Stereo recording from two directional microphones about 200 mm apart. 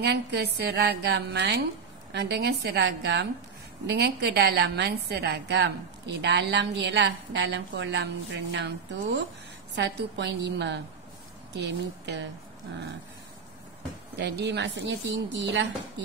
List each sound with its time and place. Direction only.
0.0 s a woman's voice: 60° right (ahead or behind)
14.1 s a woman's voice: 55° right (ahead or behind)